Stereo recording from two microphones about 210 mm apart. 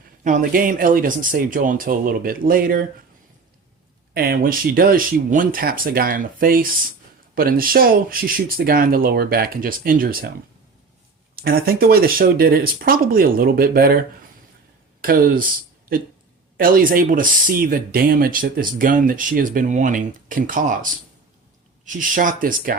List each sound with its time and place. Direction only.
0.3 s speech: 40° right (ahead or behind)
4.1 s speech: 45° right (ahead or behind)
11.4 s speech: 45° right (ahead or behind)
15.0 s speech: 45° right (ahead or behind)
21.8 s speech: 40° right (ahead or behind)